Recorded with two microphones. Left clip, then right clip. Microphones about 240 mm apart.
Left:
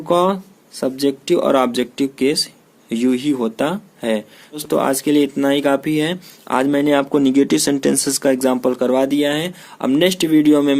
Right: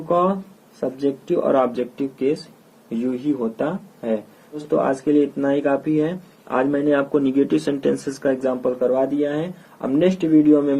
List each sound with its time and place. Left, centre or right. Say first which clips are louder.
0.1 s speech: left 3 dB; left